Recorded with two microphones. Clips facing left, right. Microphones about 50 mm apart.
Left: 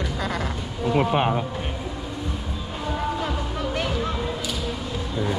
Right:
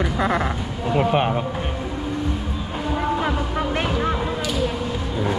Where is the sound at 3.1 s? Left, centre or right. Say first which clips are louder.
Right 5 dB; right.